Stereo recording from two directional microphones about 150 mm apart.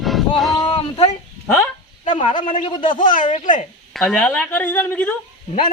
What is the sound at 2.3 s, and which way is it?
Speech, 55° left (ahead or behind).